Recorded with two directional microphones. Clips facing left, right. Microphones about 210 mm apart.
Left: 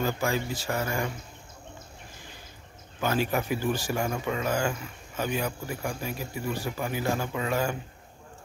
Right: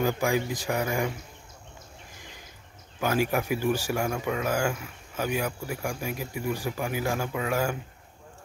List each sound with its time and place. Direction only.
0.0 s speech: 15° right (ahead or behind)
3.0 s speech: 10° right (ahead or behind)